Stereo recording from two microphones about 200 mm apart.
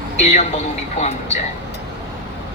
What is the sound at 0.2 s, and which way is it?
Speech, 35° left (ahead or behind).